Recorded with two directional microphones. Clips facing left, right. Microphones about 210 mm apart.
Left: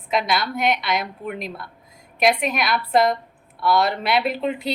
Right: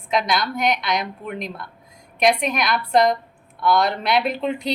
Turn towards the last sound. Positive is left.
turn(degrees=5)  # may be behind; listen again after turning